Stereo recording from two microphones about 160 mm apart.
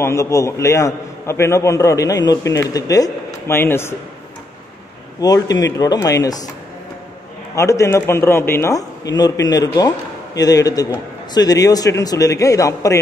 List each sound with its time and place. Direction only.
0.0 s a man's voice: 20° left (ahead or behind)
5.2 s a man's voice: 25° left (ahead or behind)
7.5 s a man's voice: 20° left (ahead or behind)